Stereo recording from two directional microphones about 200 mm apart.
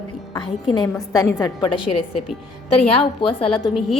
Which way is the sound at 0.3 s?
20° left (ahead or behind).